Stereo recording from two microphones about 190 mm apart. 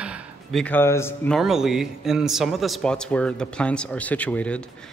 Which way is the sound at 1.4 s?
Centre (ahead or behind).